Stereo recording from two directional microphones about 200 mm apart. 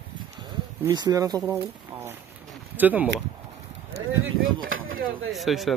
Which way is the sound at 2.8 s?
10° right (ahead or behind).